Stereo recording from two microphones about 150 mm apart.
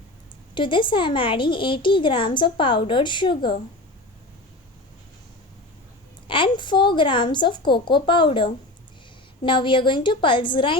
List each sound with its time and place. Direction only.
0.5 s a woman's voice: 35° left (ahead or behind)
6.2 s a woman's voice: 35° left (ahead or behind)